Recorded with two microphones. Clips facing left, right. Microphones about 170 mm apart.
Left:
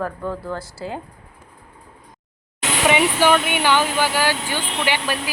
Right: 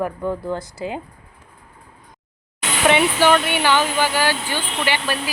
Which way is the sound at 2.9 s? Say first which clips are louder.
Right 1 dB; 10° left (ahead or behind).